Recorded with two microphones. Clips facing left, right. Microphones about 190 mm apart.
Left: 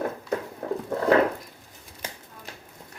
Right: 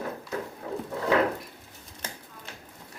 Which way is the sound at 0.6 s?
55° left (ahead or behind).